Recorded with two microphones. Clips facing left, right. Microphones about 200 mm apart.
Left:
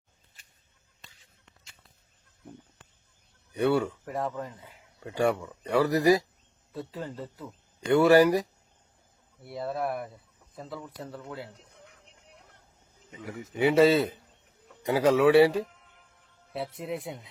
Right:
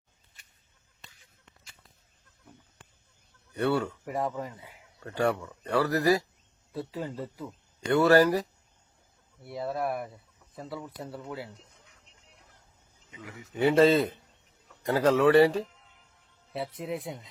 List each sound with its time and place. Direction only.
3.5 s speech: 15° left (ahead or behind)
4.0 s speech: 10° right (ahead or behind)
4.9 s speech: 10° left (ahead or behind)
6.7 s speech: 10° right (ahead or behind)
7.9 s speech: 15° left (ahead or behind)
9.4 s speech: centre (ahead or behind)
11.5 s a sound: 60° left (ahead or behind)
13.6 s speech: 10° left (ahead or behind)
15.7 s a sound: 55° left (ahead or behind)
16.7 s speech: centre (ahead or behind)